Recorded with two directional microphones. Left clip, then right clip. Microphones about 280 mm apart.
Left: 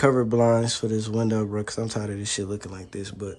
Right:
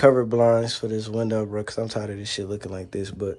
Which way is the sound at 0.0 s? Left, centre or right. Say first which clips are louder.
Right 3 dB; centre.